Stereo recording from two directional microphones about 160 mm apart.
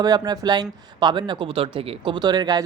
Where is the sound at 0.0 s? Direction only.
25° right (ahead or behind).